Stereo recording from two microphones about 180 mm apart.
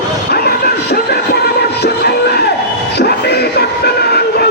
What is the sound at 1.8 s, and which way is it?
Music, 65° left (ahead or behind).